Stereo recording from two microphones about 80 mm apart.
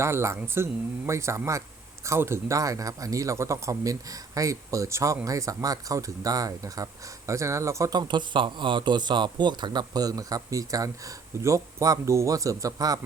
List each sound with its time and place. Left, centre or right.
0.0 s speech: right
7.9 s speech: right